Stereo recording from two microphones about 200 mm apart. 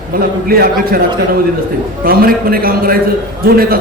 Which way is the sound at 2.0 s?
45° right (ahead or behind).